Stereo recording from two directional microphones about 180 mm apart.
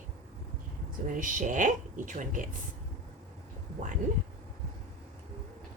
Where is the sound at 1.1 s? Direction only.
45° right (ahead or behind).